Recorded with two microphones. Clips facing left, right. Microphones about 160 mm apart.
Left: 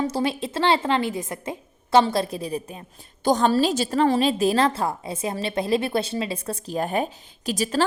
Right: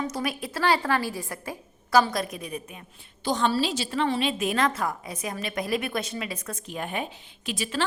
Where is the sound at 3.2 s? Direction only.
45° left (ahead or behind).